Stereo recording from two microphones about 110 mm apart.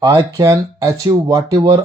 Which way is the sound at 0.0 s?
35° right (ahead or behind).